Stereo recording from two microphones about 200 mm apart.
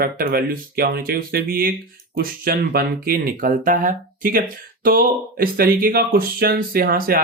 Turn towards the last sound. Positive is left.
turn(degrees=-45)  # may be behind; listen again after turning